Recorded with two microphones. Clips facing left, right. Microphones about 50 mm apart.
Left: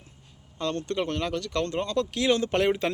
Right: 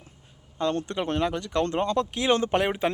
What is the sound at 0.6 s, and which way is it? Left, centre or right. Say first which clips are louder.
Speech: right 2 dB; centre.